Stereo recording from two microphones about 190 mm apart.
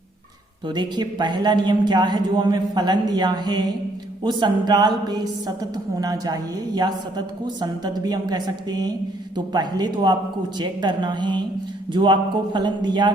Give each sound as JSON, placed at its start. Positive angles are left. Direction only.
{"t": 0.7, "sound": "a woman's voice", "side_deg": -25}
{"t": 12.5, "sound": "a woman's voice", "side_deg": -25}